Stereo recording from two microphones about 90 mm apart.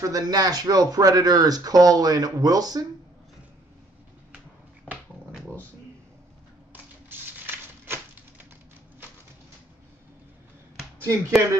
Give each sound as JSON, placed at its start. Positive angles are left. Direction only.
{"t": 0.1, "sound": "speech", "side_deg": -45}
{"t": 6.7, "sound": "typewriter", "side_deg": -20}
{"t": 11.0, "sound": "speech", "side_deg": -30}